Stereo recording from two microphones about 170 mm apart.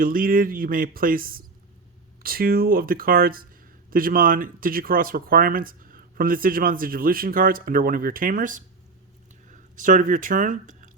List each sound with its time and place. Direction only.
0.0 s speech: 55° right (ahead or behind)